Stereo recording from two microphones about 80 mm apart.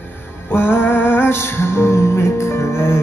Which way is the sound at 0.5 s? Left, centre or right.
Left.